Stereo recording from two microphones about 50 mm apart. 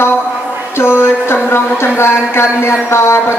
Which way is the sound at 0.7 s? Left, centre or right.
Left.